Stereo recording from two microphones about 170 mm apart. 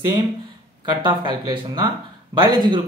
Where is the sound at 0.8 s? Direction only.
25° right (ahead or behind).